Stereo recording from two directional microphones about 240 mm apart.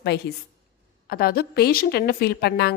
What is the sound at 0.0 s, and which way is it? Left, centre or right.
A woman's voice, left.